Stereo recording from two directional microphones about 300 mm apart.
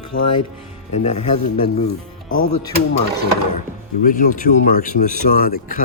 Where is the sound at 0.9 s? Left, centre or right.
Left.